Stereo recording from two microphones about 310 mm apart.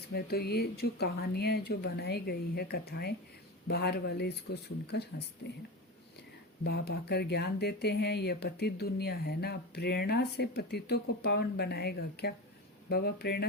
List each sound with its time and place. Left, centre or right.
0.1 s speech: left
6.7 s speech: left